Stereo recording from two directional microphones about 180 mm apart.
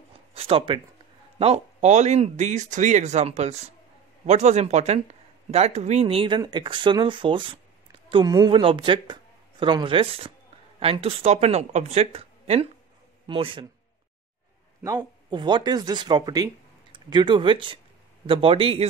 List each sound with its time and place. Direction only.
0.3 s a sound: 30° right (ahead or behind)
1.4 s speech: 40° right (ahead or behind)
14.8 s speech: 20° right (ahead or behind)